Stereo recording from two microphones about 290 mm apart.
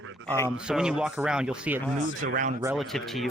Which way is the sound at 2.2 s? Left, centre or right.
Right.